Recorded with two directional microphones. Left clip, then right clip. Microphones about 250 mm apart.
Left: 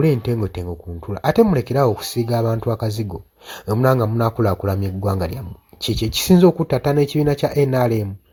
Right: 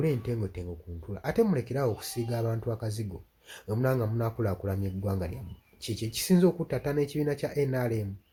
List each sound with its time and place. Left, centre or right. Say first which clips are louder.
0.0 s speech: left 11 dB; left